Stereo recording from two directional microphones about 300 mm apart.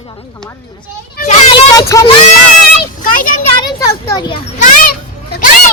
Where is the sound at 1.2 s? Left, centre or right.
Left.